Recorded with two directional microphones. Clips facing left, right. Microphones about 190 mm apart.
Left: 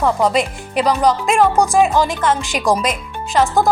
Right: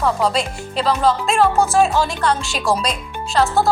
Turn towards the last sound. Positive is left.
turn(degrees=15)  # may be behind; listen again after turning